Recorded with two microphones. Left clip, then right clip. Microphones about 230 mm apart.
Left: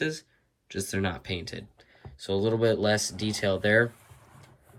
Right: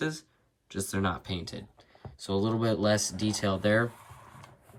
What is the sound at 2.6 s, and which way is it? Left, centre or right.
Speech, left.